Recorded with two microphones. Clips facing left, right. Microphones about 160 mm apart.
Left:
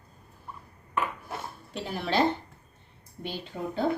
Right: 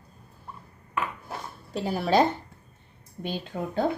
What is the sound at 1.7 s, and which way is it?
Speech, 40° right (ahead or behind).